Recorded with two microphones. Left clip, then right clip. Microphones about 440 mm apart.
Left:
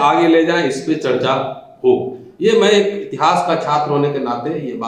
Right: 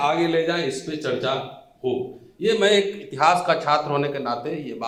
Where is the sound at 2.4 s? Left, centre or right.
Right.